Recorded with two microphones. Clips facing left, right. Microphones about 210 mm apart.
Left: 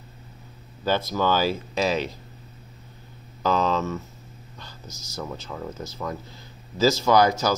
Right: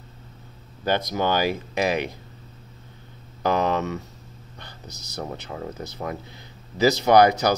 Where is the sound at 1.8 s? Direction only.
55° right (ahead or behind).